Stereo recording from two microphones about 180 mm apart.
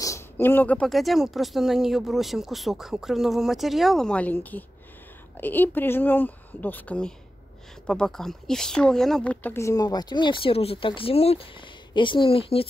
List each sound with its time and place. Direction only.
0.0 s a woman's voice: 15° left (ahead or behind); by 12.6 s 30° left (ahead or behind)